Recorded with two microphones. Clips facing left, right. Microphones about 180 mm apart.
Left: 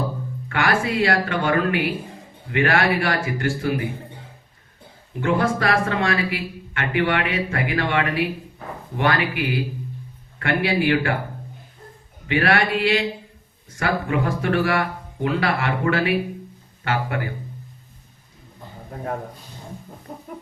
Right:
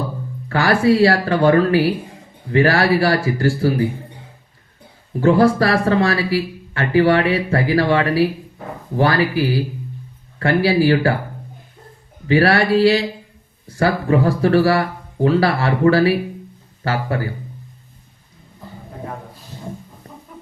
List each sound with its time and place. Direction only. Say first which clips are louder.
0.4 s speech: right 7 dB; 35° right (ahead or behind)
5.2 s speech: right 7 dB; 35° right (ahead or behind)
12.3 s speech: right 6 dB; 35° right (ahead or behind)
20.1 s music: left 5 dB; 40° left (ahead or behind)